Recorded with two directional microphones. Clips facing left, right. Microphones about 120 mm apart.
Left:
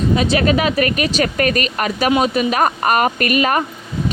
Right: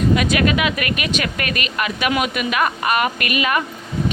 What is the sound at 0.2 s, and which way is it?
A woman's voice, 30° left (ahead or behind).